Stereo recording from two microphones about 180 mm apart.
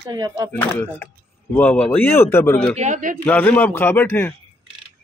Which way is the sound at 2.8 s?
45° right (ahead or behind).